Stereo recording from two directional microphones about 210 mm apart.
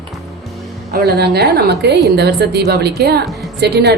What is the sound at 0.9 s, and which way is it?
A woman's voice, 50° right (ahead or behind).